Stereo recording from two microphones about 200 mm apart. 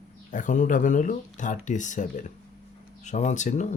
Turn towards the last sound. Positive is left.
turn(degrees=35)  # may be behind; listen again after turning